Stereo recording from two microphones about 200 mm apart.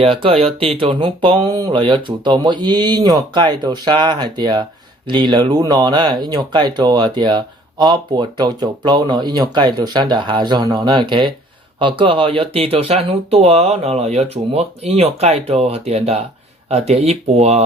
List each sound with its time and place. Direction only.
0.0 s speech: 25° right (ahead or behind)